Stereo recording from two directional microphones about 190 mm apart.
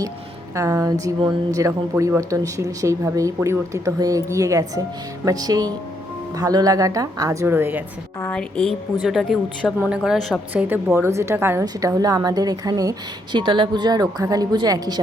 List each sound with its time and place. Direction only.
0.5 s a woman's voice: 15° right (ahead or behind)
8.2 s a woman's voice: 5° left (ahead or behind)
10.5 s a woman's voice: 10° right (ahead or behind)